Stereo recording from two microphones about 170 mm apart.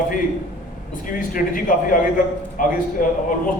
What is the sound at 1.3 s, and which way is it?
A man's voice, 55° left (ahead or behind).